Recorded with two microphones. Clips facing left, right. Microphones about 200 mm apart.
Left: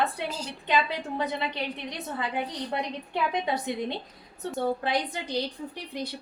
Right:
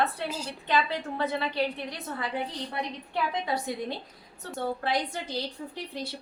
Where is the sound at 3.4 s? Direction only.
20° left (ahead or behind).